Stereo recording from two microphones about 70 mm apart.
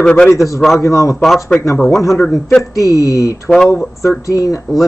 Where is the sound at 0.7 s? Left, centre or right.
Left.